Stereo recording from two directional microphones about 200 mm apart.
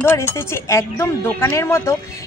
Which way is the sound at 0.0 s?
10° left (ahead or behind).